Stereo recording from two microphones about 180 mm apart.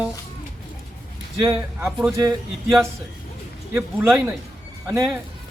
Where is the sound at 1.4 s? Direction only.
15° right (ahead or behind).